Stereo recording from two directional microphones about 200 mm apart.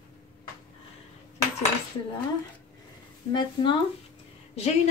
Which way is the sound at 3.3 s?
25° left (ahead or behind).